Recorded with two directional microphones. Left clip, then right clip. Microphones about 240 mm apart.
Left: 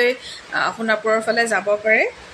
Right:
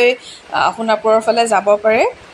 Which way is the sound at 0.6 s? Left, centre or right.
Centre.